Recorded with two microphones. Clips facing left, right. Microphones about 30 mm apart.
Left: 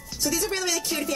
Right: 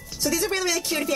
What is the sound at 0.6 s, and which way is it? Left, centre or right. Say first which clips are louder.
Speech: right 2 dB; right.